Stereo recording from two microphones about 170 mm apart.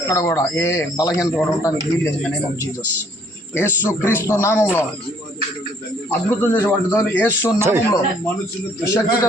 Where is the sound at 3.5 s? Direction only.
15° left (ahead or behind).